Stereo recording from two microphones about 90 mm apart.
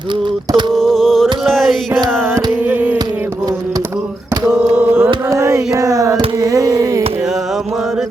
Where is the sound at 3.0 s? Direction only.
45° right (ahead or behind).